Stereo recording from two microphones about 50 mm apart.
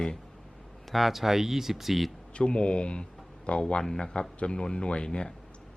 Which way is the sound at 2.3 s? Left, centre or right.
Left.